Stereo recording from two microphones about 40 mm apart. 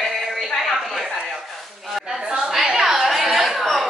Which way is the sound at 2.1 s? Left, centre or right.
Centre.